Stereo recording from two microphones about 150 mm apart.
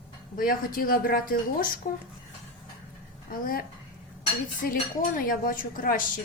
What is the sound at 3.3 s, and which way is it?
Speech, 75° left (ahead or behind).